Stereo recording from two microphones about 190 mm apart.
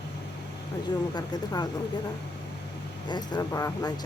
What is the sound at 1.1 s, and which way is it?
Speech, 20° left (ahead or behind).